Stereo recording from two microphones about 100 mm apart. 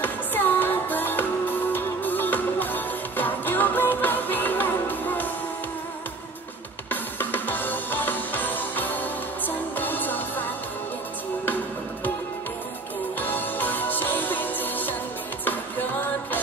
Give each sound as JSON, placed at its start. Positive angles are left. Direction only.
{"t": 0.0, "sound": "music", "side_deg": 20}
{"t": 6.9, "sound": "music", "side_deg": 20}
{"t": 13.2, "sound": "music", "side_deg": 20}